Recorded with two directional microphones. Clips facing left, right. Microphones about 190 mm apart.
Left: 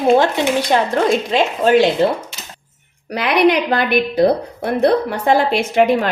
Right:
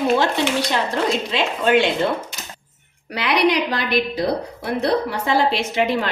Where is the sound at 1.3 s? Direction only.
40° left (ahead or behind).